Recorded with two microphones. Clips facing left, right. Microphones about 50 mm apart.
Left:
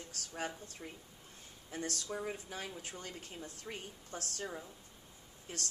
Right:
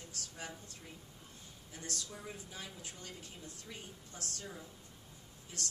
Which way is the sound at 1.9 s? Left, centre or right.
Left.